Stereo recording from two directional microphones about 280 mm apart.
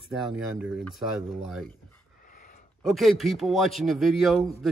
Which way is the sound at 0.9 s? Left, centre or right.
Centre.